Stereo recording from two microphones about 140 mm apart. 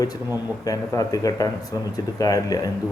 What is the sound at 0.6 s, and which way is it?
A man's voice, 25° left (ahead or behind).